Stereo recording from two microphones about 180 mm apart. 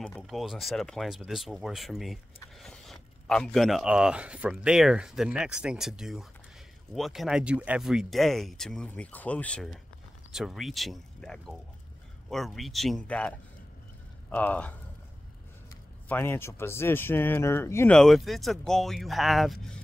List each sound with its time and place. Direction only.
0.0 s speech: 5° left (ahead or behind)
14.3 s speech: 10° left (ahead or behind)
16.1 s speech: 10° left (ahead or behind)
17.9 s speech: centre (ahead or behind)